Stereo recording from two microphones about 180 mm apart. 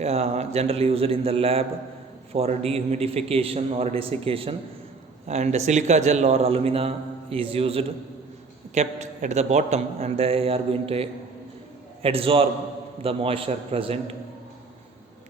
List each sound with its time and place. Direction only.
0.0 s a man's voice: 35° right (ahead or behind)